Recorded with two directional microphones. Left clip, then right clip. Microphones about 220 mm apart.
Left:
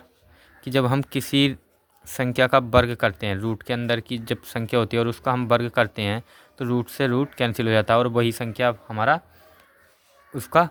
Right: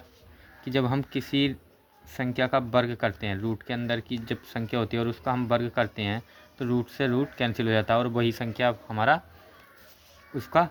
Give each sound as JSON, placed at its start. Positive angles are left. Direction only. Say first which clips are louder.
{"t": 0.6, "sound": "speech", "louder": "left 5 dB", "side_deg": 35}
{"t": 10.3, "sound": "speech", "louder": "left 4 dB", "side_deg": 30}